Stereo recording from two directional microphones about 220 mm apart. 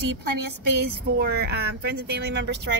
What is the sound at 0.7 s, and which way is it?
Speech, 45° right (ahead or behind).